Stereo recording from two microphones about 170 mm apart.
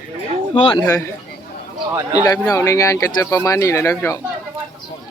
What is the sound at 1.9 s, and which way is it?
Speech, 10° right (ahead or behind).